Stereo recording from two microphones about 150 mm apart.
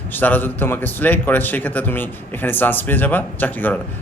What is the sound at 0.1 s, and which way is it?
A man's voice, 10° left (ahead or behind).